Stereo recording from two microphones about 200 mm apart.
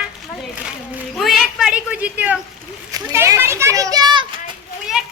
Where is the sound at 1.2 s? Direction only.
Centre (ahead or behind).